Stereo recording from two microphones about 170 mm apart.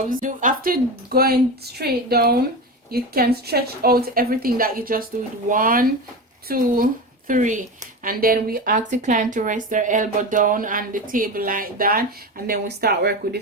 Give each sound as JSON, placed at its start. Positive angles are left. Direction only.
{"t": 0.0, "sound": "a woman's voice", "side_deg": -50}
{"t": 12.5, "sound": "speech", "side_deg": -70}